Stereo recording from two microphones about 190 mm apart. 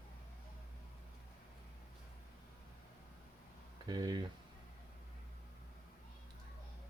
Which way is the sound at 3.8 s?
20° right (ahead or behind).